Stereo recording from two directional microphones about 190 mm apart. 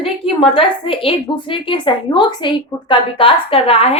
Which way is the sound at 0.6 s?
30° left (ahead or behind).